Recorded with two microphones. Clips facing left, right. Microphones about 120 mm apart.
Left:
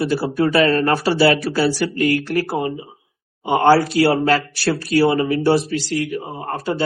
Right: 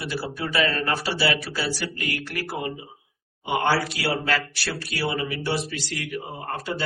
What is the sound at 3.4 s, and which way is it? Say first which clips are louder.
Speech: left 9 dB; 40° left (ahead or behind).